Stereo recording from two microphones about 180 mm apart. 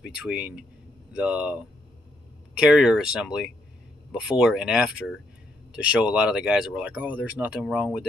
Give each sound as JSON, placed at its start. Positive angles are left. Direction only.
{"t": 0.0, "sound": "speech", "side_deg": -5}